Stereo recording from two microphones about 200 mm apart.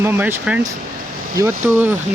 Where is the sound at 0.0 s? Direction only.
10° right (ahead or behind).